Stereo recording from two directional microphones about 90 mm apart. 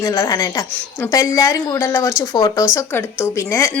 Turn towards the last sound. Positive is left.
turn(degrees=35)  # may be behind; listen again after turning